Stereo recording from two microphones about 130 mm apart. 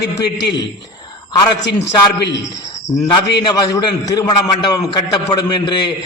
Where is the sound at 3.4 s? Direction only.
35° left (ahead or behind).